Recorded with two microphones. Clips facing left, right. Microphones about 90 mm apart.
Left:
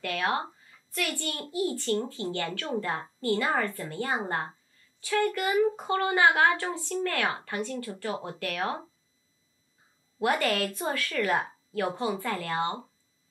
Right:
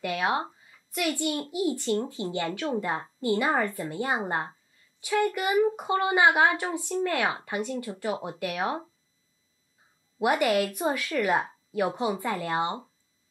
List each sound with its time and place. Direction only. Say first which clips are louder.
0.0 s a child's voice: right 2 dB; 15° right (ahead or behind)
10.1 s speech: right 3 dB; 15° right (ahead or behind)